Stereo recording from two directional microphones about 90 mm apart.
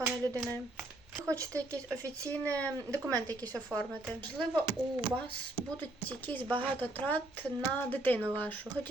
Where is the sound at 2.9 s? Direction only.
40° right (ahead or behind).